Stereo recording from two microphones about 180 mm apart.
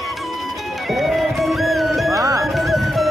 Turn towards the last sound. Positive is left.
turn(degrees=0)  # may be behind; listen again after turning